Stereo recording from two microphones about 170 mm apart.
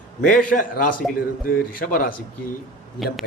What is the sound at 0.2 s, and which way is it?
A man's voice, 50° left (ahead or behind).